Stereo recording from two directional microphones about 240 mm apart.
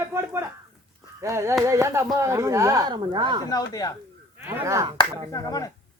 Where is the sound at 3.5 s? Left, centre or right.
Centre.